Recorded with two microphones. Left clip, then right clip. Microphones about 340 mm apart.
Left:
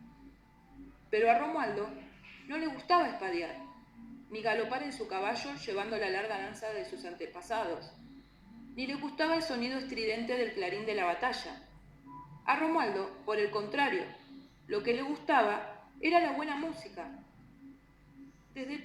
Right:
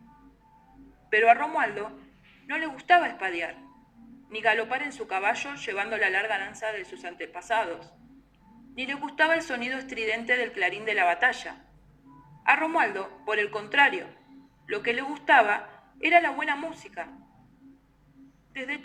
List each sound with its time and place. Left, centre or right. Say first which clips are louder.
1.2 s a woman's voice: right 7 dB; right
18.5 s speech: right 8 dB; right